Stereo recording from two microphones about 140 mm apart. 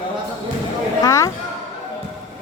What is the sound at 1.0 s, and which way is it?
Speech, 25° left (ahead or behind).